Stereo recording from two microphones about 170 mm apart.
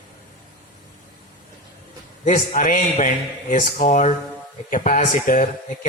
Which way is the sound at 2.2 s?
50° left (ahead or behind).